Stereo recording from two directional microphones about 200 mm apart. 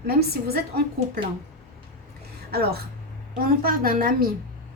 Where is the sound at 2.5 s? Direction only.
50° right (ahead or behind).